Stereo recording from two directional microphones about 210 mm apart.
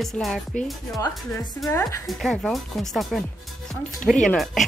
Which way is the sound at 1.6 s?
15° left (ahead or behind).